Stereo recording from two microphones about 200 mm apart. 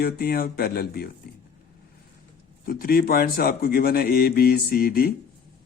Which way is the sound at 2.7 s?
50° left (ahead or behind).